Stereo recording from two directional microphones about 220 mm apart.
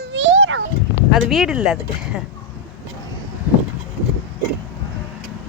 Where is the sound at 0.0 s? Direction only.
55° right (ahead or behind).